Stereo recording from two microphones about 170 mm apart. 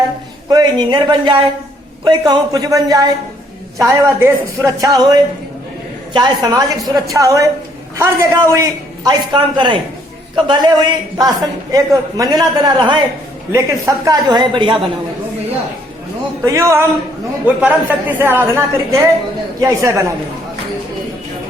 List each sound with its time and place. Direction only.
0.5 s a man's voice: 25° right (ahead or behind)
16.5 s a woman's voice: 15° right (ahead or behind)